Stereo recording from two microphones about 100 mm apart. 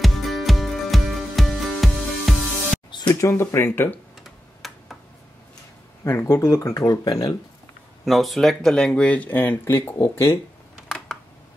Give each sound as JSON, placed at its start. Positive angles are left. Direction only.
{"t": 0.0, "sound": "music", "side_deg": 0}
{"t": 2.9, "sound": "a sound", "side_deg": 45}
{"t": 3.2, "sound": "speech", "side_deg": 25}
{"t": 4.2, "sound": "tick-tock", "side_deg": 0}
{"t": 6.0, "sound": "speech", "side_deg": 30}
{"t": 8.0, "sound": "speech", "side_deg": 0}